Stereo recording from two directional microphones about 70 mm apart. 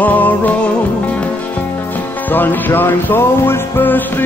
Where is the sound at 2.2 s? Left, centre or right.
Left.